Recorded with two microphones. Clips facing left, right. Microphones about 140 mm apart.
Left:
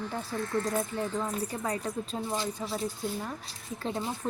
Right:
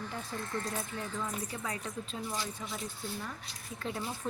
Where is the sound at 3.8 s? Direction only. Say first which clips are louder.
Left 4 dB; 30° left (ahead or behind).